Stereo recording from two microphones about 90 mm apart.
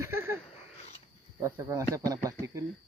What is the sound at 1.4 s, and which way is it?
Speech, 35° right (ahead or behind).